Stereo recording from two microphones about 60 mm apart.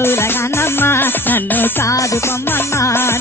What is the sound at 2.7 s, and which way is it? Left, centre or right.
Music, left.